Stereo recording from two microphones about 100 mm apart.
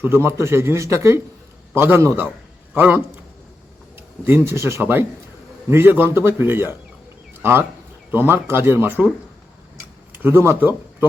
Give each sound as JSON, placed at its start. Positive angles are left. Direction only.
{"t": 0.0, "sound": "a man's voice", "side_deg": -25}
{"t": 4.2, "sound": "a man's voice", "side_deg": -25}
{"t": 8.1, "sound": "a man's voice", "side_deg": -20}
{"t": 10.2, "sound": "a man's voice", "side_deg": -25}